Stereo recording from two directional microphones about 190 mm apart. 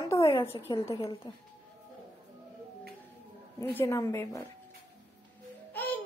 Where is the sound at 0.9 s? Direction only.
25° left (ahead or behind).